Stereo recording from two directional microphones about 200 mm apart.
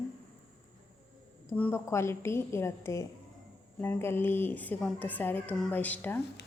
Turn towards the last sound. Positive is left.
turn(degrees=10)  # may be behind; listen again after turning